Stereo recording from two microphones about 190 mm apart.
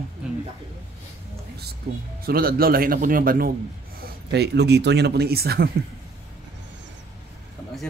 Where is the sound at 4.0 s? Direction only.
60° right (ahead or behind).